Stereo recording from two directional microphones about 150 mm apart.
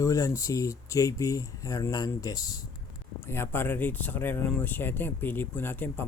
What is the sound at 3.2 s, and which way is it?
Speech, 15° left (ahead or behind).